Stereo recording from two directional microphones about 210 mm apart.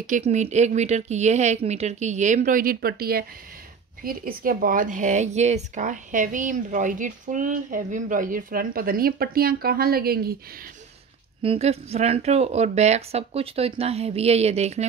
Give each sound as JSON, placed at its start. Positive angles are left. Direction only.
{"t": 0.0, "sound": "a woman's voice", "side_deg": -35}
{"t": 11.4, "sound": "speech", "side_deg": -30}